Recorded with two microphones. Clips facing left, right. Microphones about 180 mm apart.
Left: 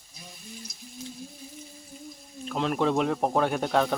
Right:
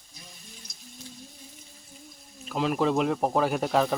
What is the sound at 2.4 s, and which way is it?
Speech, centre (ahead or behind).